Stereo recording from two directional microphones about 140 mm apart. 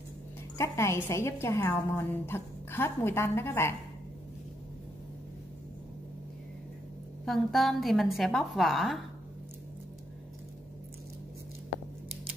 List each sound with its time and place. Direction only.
0.6 s a woman's voice: 20° left (ahead or behind)
7.2 s a woman's voice: centre (ahead or behind)